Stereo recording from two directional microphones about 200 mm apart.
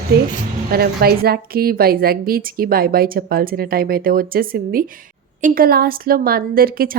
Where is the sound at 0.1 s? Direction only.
50° right (ahead or behind).